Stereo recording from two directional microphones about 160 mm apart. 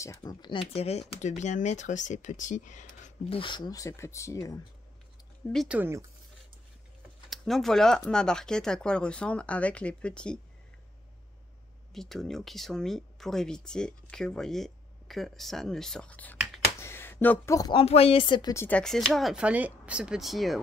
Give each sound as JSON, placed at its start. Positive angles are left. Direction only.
{"t": 0.0, "sound": "speech", "side_deg": 20}
{"t": 3.3, "sound": "speech", "side_deg": 30}
{"t": 5.7, "sound": "speech", "side_deg": -15}
{"t": 7.2, "sound": "speech", "side_deg": 0}
{"t": 11.9, "sound": "speech", "side_deg": 0}
{"t": 16.8, "sound": "a sound", "side_deg": 15}
{"t": 17.6, "sound": "speech", "side_deg": 25}
{"t": 17.8, "sound": "speech", "side_deg": 40}